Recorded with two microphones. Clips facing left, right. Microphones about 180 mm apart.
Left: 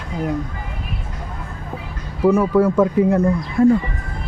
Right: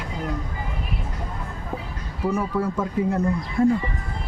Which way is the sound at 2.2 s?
90° left.